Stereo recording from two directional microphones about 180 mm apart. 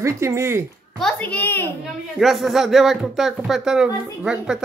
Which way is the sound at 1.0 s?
5° left (ahead or behind).